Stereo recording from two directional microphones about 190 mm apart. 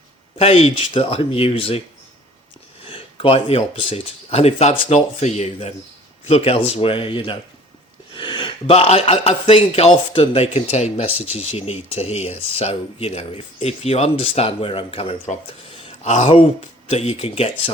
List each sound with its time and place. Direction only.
0.3 s speech: 30° left (ahead or behind)
2.8 s speech: 30° left (ahead or behind)